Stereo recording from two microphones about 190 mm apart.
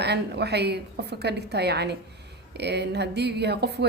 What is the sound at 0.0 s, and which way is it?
A woman's voice, 60° right (ahead or behind).